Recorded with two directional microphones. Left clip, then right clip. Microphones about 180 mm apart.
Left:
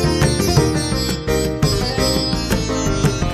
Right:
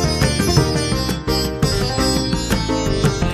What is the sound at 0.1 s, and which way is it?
Music, centre (ahead or behind).